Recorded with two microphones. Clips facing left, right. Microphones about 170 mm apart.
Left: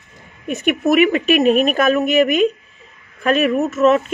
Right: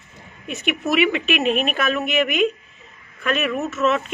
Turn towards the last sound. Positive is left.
turn(degrees=40)  # may be behind; listen again after turning